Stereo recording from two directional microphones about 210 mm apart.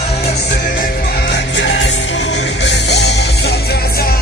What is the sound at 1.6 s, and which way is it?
Music, 60° left (ahead or behind).